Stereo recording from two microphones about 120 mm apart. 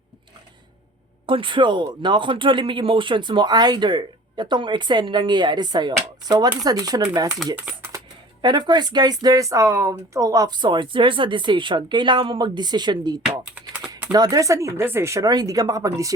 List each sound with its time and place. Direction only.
1.3 s speech: 45° right (ahead or behind); by 16.1 s 30° right (ahead or behind)